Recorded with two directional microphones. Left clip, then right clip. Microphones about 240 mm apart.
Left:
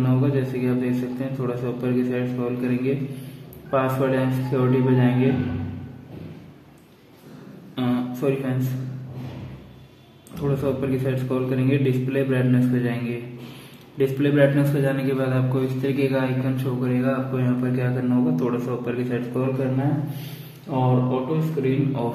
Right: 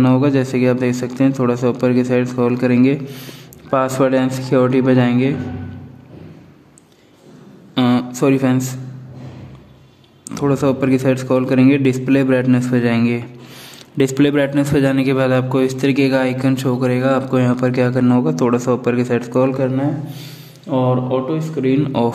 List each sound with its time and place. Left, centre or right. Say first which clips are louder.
0.0 s a man's voice: right 9 dB; right
7.7 s a man's voice: right 9 dB; right
10.3 s a man's voice: right 8 dB; right
20.7 s a man's voice: right 6 dB; right